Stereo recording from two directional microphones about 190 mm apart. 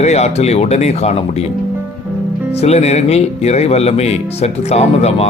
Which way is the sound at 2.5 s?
35° left (ahead or behind).